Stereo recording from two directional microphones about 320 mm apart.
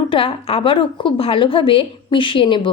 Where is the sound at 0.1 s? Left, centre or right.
Centre.